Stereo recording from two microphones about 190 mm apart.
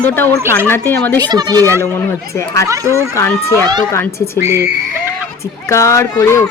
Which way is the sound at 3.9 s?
15° left (ahead or behind).